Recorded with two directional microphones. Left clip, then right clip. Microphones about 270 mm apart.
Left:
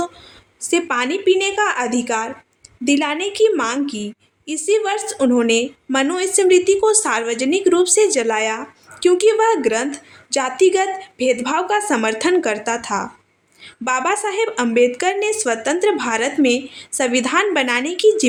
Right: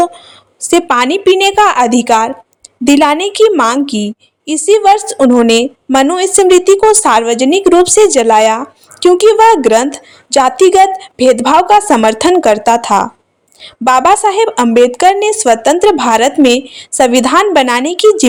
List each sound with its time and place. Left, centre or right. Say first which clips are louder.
0.6 s a woman's voice: right 9 dB; right